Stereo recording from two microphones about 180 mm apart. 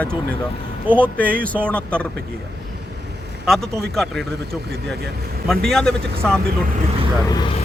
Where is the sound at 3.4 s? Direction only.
Centre (ahead or behind).